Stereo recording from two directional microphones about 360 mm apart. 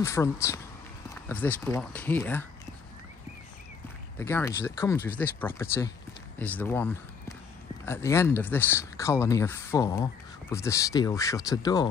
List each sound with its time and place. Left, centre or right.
0.0 s speech: centre
4.2 s speech: centre